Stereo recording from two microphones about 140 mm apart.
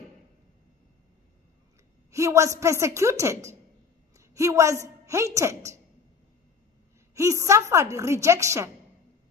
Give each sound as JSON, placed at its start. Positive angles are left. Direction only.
{"t": 2.0, "sound": "a woman's voice", "side_deg": -20}
{"t": 7.2, "sound": "a woman's voice", "side_deg": -20}